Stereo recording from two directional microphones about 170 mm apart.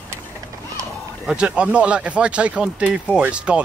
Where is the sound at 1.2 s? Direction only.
5° right (ahead or behind).